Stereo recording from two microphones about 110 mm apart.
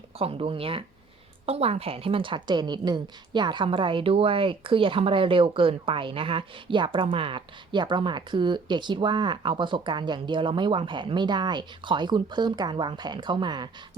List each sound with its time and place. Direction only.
0.2 s speech: 60° right (ahead or behind)
1.5 s a woman's voice: 70° right (ahead or behind); by 13.7 s 40° right (ahead or behind)